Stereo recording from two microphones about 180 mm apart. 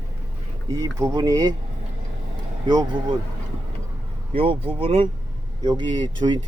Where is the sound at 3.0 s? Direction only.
30° right (ahead or behind).